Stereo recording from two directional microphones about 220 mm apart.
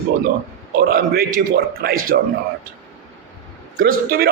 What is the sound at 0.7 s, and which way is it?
A man's voice, 45° right (ahead or behind).